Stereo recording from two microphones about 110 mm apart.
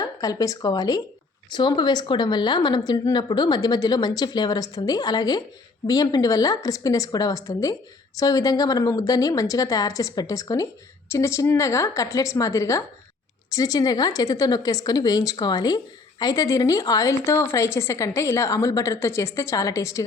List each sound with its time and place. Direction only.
0.0 s a woman's voice: 35° left (ahead or behind)